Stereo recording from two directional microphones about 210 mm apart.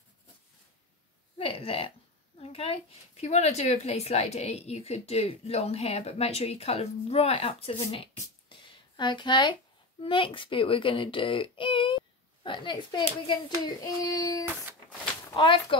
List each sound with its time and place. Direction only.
1.4 s speech: 25° left (ahead or behind)
14.0 s child singing: 15° left (ahead or behind)
15.3 s speech: 25° left (ahead or behind)